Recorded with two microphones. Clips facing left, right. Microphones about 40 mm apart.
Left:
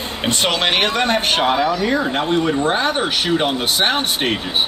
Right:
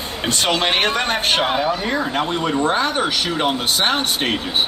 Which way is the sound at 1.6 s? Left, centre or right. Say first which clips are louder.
Left 2 dB; right.